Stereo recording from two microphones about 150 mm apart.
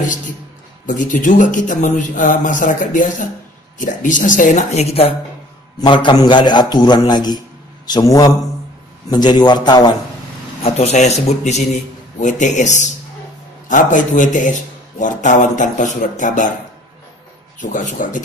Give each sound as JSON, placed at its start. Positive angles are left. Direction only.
{"t": 0.8, "sound": "a man's voice", "side_deg": 60}
{"t": 5.8, "sound": "a man's voice", "side_deg": 30}
{"t": 10.6, "sound": "a man's voice", "side_deg": 45}
{"t": 17.6, "sound": "a man's voice", "side_deg": 60}